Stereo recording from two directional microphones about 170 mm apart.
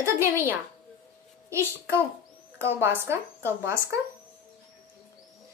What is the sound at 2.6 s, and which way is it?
Speech, 15° right (ahead or behind).